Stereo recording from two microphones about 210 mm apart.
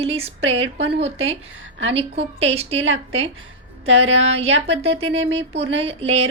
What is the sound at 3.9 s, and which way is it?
Speech, 65° right (ahead or behind).